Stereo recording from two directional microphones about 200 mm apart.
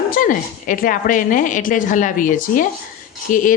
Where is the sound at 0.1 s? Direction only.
45° left (ahead or behind).